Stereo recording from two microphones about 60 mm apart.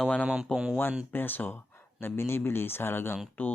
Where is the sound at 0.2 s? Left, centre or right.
Centre.